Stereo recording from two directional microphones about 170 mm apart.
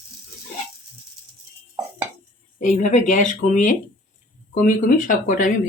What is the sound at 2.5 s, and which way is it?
Speech, 45° left (ahead or behind).